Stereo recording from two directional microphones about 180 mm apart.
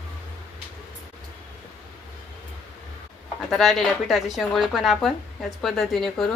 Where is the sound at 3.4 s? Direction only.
Centre (ahead or behind).